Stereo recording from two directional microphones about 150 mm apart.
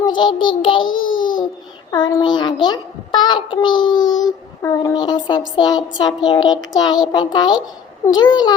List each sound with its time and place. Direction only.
0.0 s child singing: 30° left (ahead or behind)
1.2 s babbling: 30° left (ahead or behind)
1.9 s a child's voice: 25° left (ahead or behind)